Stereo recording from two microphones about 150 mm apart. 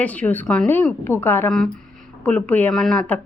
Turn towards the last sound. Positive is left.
turn(degrees=10)  # may be behind; listen again after turning